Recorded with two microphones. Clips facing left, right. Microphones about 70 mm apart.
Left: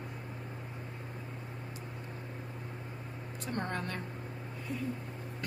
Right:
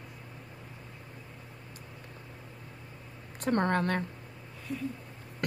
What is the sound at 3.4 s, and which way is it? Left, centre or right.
Speech, right.